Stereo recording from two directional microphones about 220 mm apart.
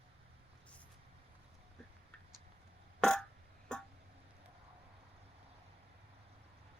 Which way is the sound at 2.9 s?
5° left (ahead or behind).